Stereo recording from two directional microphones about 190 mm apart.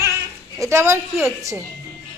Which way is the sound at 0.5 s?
15° right (ahead or behind).